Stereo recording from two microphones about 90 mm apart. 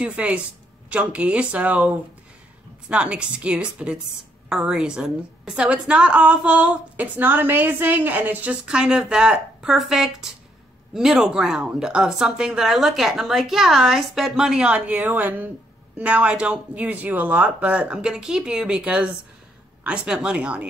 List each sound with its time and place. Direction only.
0.0 s a woman's voice: 15° right (ahead or behind)
2.9 s a woman's voice: 10° right (ahead or behind)